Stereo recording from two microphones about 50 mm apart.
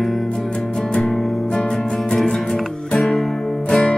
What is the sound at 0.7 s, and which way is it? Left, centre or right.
Music, centre.